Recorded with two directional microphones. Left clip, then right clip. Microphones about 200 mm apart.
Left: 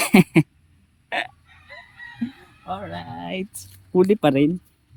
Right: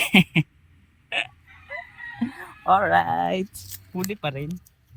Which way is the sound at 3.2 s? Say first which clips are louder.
Right 7 dB; 5° left (ahead or behind).